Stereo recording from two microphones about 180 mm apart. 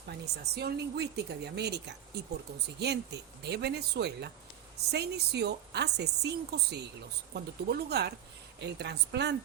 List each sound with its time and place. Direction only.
0.5 s a woman's voice: 65° right (ahead or behind)